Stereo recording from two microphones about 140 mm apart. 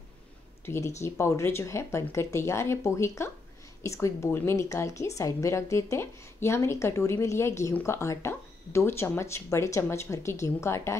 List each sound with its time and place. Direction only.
0.7 s a woman's voice: 20° left (ahead or behind)